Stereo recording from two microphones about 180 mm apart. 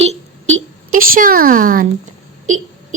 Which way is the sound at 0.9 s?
50° right (ahead or behind).